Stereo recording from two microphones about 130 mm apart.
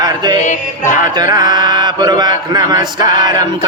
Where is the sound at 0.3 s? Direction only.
70° left (ahead or behind).